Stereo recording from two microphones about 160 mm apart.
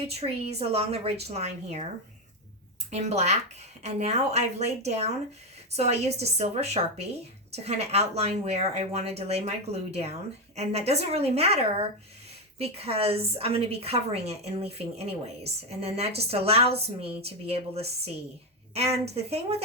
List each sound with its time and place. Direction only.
0.2 s a woman's voice: 40° right (ahead or behind)
2.9 s a woman's voice: 45° right (ahead or behind)